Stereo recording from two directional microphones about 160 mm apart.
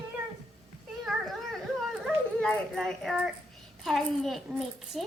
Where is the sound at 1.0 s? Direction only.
Centre (ahead or behind).